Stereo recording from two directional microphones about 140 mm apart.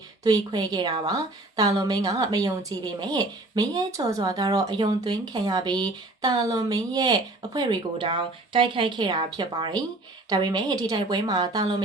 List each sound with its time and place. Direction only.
0.3 s a woman's voice: 30° right (ahead or behind)